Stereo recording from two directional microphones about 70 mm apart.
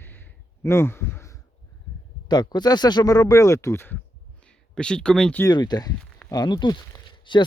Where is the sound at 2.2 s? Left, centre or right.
Left.